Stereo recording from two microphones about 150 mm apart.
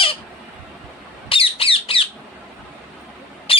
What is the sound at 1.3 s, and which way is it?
Squawk, 40° left (ahead or behind).